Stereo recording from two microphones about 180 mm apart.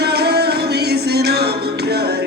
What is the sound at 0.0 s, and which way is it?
Music, 65° right (ahead or behind).